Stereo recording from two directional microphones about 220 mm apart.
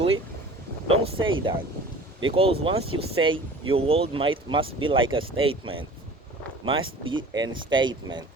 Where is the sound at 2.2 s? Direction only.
25° right (ahead or behind).